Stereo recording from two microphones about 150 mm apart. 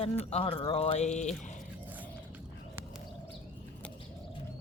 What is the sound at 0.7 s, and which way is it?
Speech, 45° left (ahead or behind).